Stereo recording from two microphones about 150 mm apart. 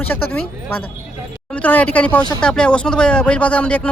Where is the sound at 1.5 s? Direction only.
10° left (ahead or behind).